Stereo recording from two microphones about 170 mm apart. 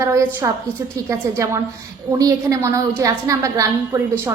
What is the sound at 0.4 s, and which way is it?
A woman's voice, 15° right (ahead or behind).